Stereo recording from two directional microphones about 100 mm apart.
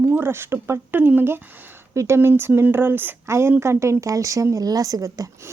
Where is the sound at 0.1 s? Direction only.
25° right (ahead or behind).